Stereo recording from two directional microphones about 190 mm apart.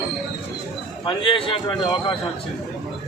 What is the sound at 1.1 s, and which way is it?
Speech, 25° left (ahead or behind).